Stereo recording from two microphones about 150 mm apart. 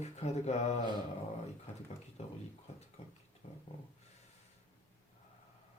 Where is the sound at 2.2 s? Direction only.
45° left (ahead or behind).